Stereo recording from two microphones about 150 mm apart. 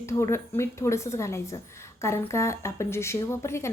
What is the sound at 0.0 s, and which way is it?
A woman's voice, 20° left (ahead or behind).